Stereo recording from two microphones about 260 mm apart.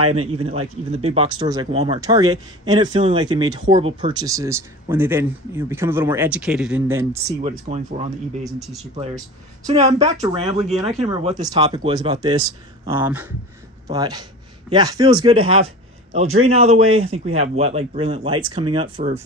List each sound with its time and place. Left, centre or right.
0.4 s speech: right
7.4 s speech: right
10.8 s speech: centre